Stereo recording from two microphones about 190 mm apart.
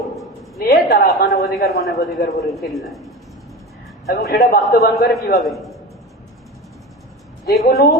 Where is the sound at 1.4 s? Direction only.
Centre (ahead or behind).